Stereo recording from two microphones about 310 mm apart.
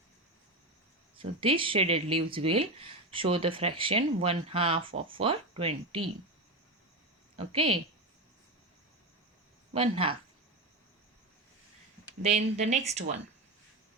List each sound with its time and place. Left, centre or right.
1.2 s speech: centre
7.3 s speech: centre
9.7 s speech: centre
12.2 s speech: right